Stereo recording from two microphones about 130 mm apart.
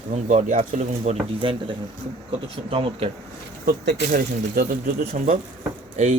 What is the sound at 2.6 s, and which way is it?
Speech, 45° right (ahead or behind).